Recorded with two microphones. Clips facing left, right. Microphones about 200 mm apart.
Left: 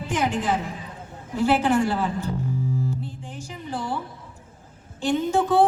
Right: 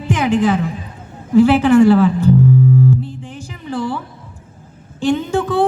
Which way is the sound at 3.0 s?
80° right.